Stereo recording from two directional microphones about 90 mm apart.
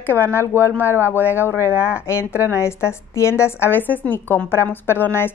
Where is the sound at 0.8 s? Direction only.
25° right (ahead or behind).